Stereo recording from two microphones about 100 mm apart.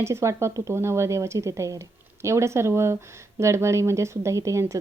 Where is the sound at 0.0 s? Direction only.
30° right (ahead or behind).